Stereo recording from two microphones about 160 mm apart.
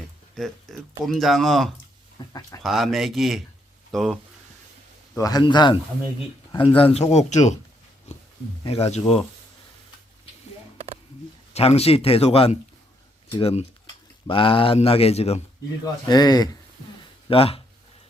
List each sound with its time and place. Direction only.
0.3 s speech: centre (ahead or behind)
2.2 s speech: 25° left (ahead or behind)
2.6 s speech: centre (ahead or behind)
5.1 s a man's voice: 25° left (ahead or behind); by 7.6 s 45° left (ahead or behind)
8.6 s speech: 40° left (ahead or behind)
11.5 s speech: 40° left (ahead or behind)
15.8 s a man's voice: 25° left (ahead or behind)
17.2 s speech: 35° left (ahead or behind)